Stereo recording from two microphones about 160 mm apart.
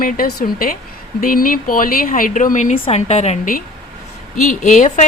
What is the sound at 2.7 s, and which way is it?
A woman's voice, 40° left (ahead or behind).